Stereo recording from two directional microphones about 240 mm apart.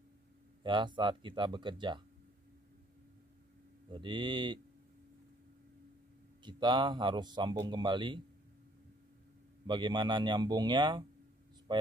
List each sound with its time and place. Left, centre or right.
0.7 s speech: centre
3.9 s speech: centre
6.4 s speech: centre
9.7 s speech: centre